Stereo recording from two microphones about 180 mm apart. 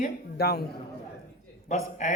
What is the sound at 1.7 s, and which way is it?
Speech, 40° left (ahead or behind).